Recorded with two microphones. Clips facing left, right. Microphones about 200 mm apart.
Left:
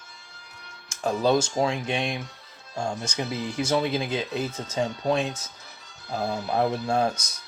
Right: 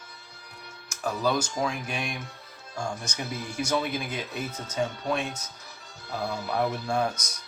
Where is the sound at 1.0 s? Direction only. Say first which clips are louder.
Left 5 dB; 25° left (ahead or behind).